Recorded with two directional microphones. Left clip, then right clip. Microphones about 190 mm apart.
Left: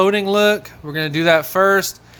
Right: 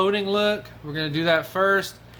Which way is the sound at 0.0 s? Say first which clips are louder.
Left 7 dB; 35° left (ahead or behind).